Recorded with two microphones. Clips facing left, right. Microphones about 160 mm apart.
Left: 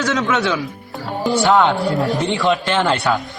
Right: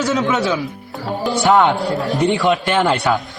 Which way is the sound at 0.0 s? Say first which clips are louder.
Right 1 dB; 10° right (ahead or behind).